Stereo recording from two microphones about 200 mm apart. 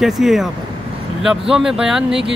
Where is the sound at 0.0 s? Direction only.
Centre (ahead or behind).